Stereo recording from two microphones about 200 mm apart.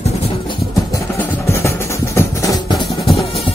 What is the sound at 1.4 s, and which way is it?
Music, 15° left (ahead or behind).